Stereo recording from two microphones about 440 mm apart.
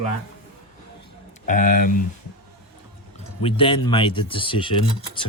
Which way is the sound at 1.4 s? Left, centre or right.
Centre.